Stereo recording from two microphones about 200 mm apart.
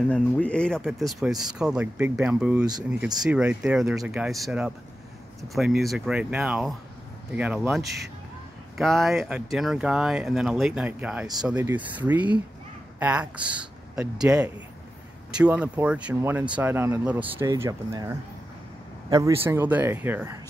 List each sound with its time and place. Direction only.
0.1 s speech: 5° left (ahead or behind); by 20.3 s 10° right (ahead or behind)